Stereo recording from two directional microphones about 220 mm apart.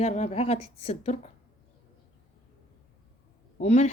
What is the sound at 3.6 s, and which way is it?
Speech, 30° left (ahead or behind).